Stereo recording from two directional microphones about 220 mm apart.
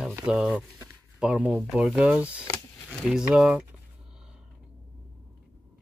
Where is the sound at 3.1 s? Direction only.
Centre (ahead or behind).